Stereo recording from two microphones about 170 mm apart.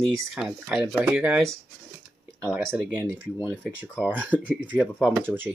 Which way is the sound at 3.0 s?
10° right (ahead or behind).